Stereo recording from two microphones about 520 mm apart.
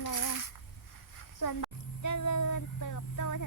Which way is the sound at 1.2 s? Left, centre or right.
Left.